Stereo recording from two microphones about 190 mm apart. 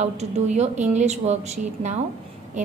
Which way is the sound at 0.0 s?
35° right (ahead or behind).